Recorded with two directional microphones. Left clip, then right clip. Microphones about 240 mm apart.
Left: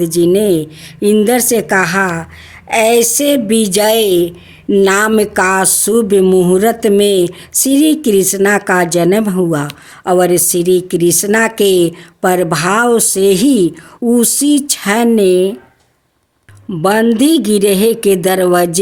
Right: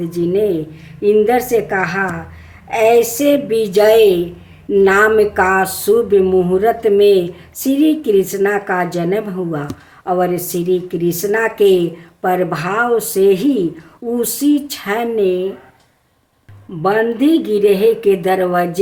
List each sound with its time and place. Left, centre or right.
0.0 s speech: left
16.8 s speech: left